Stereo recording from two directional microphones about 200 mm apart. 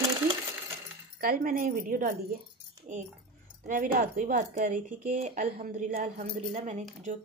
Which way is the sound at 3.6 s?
45° right (ahead or behind).